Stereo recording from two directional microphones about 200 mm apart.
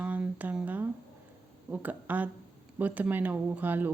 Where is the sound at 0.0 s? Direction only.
5° right (ahead or behind).